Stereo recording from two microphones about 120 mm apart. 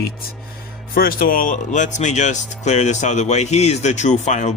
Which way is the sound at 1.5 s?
90° left.